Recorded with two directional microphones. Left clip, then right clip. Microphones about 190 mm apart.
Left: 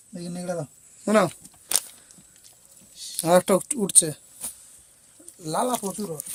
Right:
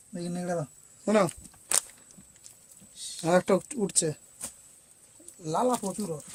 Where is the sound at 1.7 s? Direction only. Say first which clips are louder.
Left 2 dB; 35° left (ahead or behind).